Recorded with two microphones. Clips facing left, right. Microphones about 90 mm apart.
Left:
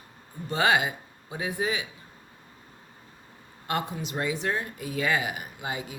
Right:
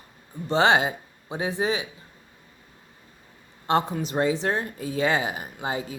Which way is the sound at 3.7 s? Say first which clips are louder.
Right 7 dB; 25° right (ahead or behind).